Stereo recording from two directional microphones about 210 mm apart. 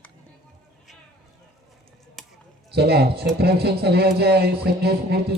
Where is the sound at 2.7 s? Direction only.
50° right (ahead or behind).